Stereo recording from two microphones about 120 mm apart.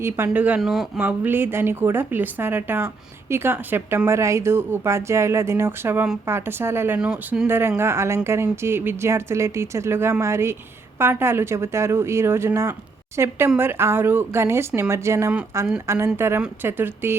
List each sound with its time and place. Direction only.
0.0 s speech: 15° right (ahead or behind)
0.6 s speech: centre (ahead or behind); by 7.0 s 20° right (ahead or behind)
7.0 s speech: 5° right (ahead or behind)
7.4 s speech: 20° right (ahead or behind)